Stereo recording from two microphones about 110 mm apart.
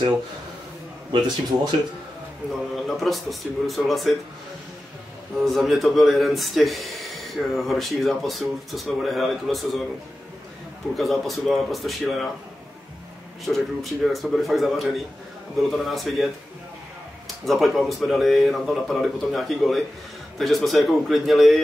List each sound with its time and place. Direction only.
1.1 s a man's voice: 40° right (ahead or behind)
2.7 s speech: centre (ahead or behind)
5.4 s speech: centre (ahead or behind)
11.0 s speech: centre (ahead or behind)
13.5 s speech: centre (ahead or behind)
17.5 s speech: centre (ahead or behind)